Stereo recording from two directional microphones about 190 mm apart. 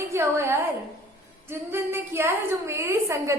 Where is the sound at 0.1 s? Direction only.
15° right (ahead or behind).